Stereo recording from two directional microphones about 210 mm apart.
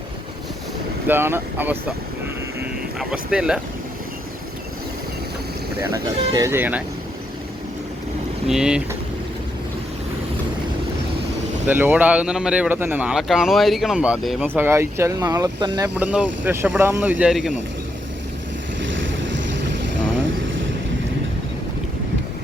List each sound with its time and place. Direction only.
1.0 s speech: 10° right (ahead or behind)
3.0 s speech: 5° right (ahead or behind)
5.9 s speech: 15° right (ahead or behind)
8.4 s speech: 5° right (ahead or behind)
11.7 s speech: 10° right (ahead or behind)
16.0 s speech: 10° right (ahead or behind)
18.8 s boat: 60° right (ahead or behind)